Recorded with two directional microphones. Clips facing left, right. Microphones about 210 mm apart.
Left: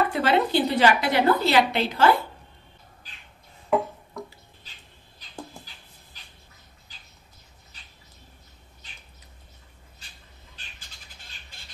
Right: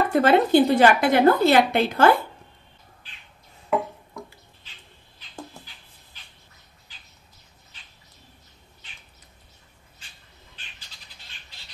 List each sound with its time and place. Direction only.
0.1 s a woman's voice: 50° right (ahead or behind)
5.2 s a sound: 40° left (ahead or behind)
11.5 s squawk: 50° left (ahead or behind)